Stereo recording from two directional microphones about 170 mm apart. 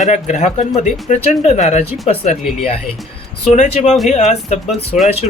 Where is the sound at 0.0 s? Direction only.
45° left (ahead or behind).